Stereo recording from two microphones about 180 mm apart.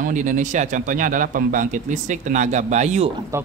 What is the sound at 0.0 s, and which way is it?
A man's voice, 45° right (ahead or behind).